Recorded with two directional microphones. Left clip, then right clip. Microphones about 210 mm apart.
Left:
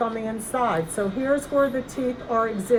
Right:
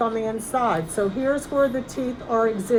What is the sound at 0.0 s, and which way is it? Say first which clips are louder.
Speech: right 3 dB; 15° right (ahead or behind).